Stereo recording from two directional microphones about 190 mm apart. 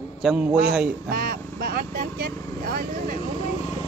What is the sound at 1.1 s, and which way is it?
Speech, 55° right (ahead or behind).